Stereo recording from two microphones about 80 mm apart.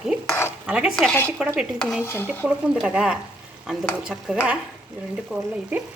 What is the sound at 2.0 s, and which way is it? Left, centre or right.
Dishes, left.